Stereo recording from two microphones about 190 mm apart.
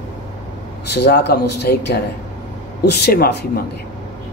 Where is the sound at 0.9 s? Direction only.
60° left (ahead or behind).